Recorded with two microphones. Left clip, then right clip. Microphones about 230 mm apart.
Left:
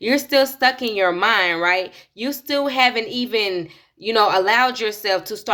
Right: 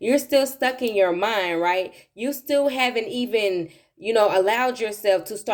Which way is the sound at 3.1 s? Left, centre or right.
Left.